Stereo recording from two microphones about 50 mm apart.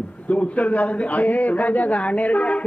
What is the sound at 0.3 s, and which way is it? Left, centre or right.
A man's voice, left.